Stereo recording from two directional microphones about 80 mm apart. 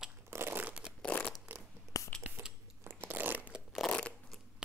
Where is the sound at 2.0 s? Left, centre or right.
Left.